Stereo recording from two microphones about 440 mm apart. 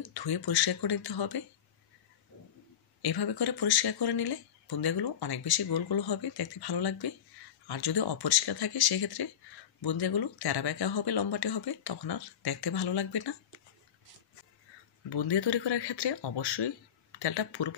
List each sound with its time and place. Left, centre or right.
0.0 s speech: left
3.0 s speech: left
15.0 s speech: left